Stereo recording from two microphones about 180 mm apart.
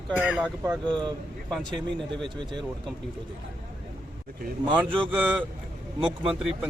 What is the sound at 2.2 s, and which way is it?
Speech, 25° right (ahead or behind).